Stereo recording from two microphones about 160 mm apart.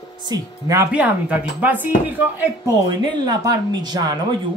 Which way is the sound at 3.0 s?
25° right (ahead or behind).